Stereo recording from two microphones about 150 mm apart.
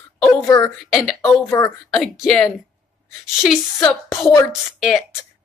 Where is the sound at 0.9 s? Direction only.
Centre (ahead or behind).